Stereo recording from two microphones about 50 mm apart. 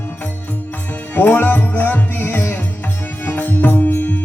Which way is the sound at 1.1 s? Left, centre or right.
Left.